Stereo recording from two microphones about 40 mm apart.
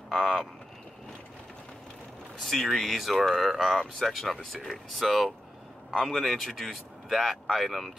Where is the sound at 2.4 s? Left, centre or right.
Centre.